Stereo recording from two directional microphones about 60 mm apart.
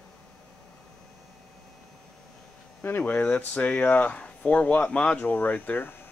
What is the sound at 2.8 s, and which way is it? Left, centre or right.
Speech, left.